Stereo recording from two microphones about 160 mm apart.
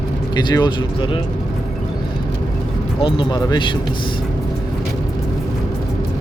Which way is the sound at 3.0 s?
30° left (ahead or behind).